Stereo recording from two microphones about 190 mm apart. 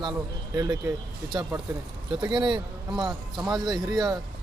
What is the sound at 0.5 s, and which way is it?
A man's voice, 15° right (ahead or behind).